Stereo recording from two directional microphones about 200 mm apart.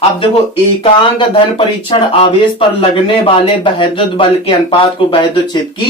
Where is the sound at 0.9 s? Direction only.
25° left (ahead or behind).